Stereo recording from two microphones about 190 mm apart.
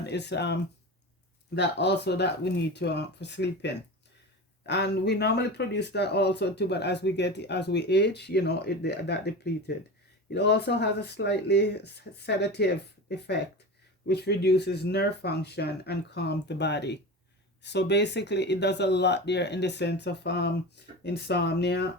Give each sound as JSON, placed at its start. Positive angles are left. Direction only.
{"t": 0.0, "sound": "speech", "side_deg": 65}